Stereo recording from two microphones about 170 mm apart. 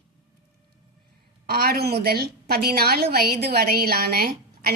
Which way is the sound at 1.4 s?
65° right (ahead or behind).